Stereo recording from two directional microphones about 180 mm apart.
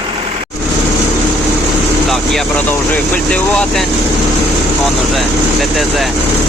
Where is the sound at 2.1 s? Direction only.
Centre (ahead or behind).